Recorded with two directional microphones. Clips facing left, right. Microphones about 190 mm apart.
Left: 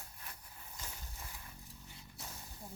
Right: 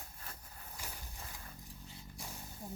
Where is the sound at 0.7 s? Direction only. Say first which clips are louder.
Right 1 dB; 10° right (ahead or behind).